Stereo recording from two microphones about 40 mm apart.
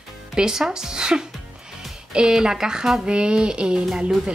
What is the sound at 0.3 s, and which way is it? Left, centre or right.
A woman's voice, centre.